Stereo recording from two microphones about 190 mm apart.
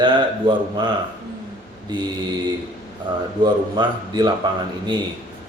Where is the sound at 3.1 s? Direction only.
25° right (ahead or behind).